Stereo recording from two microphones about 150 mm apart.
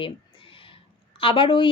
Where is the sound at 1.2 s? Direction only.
35° left (ahead or behind).